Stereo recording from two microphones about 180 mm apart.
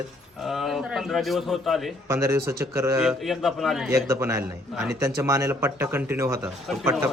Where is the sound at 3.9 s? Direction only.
15° right (ahead or behind).